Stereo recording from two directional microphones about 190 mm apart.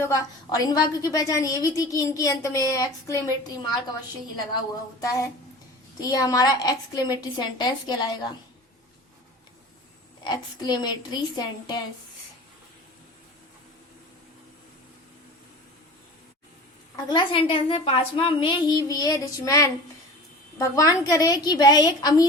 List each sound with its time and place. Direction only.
0.0 s a woman's voice: 20° left (ahead or behind)
4.9 s a woman's voice: 15° left (ahead or behind)
10.2 s a woman's voice: 20° left (ahead or behind)
17.1 s a woman's voice: 25° left (ahead or behind)